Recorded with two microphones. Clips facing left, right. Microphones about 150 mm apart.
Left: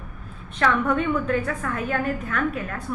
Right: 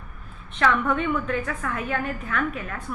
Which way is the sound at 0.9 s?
35° left (ahead or behind).